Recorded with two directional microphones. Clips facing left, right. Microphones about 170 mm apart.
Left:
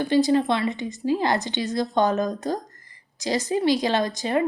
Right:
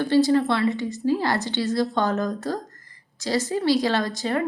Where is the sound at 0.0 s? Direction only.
15° left (ahead or behind).